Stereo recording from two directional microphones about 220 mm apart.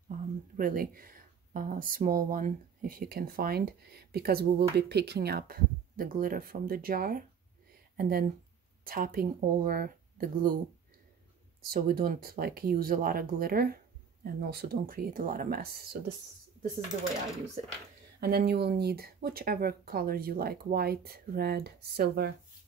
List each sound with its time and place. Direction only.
0.6 s speech: 40° right (ahead or behind)
11.6 s speech: 45° right (ahead or behind)
17.6 s speech: 30° right (ahead or behind)
18.2 s speech: 45° right (ahead or behind)